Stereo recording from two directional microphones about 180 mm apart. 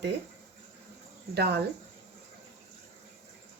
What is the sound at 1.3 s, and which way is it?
Speech, 65° right (ahead or behind).